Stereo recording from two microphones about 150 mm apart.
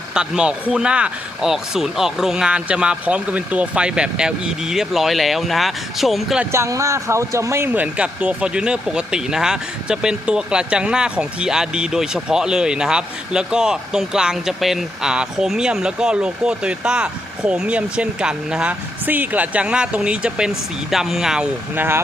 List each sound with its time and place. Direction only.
0.1 s a man's voice: 5° right (ahead or behind)
6.5 s speech: 20° right (ahead or behind)